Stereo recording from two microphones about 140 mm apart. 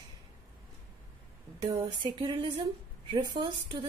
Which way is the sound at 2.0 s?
35° right (ahead or behind).